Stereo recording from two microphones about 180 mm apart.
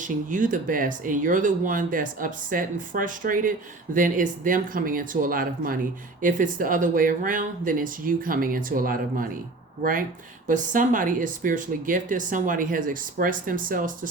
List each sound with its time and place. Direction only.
0.0 s speech: 45° right (ahead or behind)
10.5 s speech: 45° right (ahead or behind)